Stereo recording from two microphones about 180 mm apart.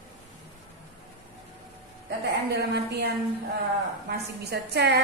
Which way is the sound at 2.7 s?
65° right (ahead or behind).